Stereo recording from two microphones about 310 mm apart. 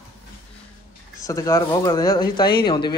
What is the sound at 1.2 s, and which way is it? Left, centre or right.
Speech, centre.